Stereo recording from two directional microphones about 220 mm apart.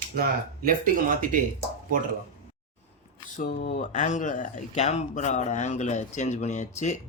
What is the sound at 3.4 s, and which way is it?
Speech, 40° left (ahead or behind).